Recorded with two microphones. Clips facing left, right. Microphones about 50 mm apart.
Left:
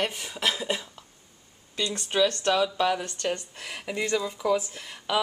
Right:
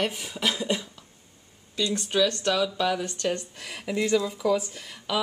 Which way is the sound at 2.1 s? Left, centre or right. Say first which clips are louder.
Left 1 dB; centre.